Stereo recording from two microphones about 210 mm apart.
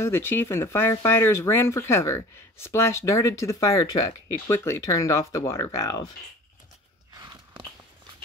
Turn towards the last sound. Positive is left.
turn(degrees=-20)  # may be behind; listen again after turning